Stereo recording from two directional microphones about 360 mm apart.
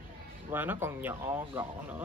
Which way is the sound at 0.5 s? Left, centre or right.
Centre.